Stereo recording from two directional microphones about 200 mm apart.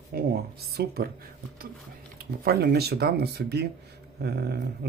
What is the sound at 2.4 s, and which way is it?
Speech, 50° right (ahead or behind).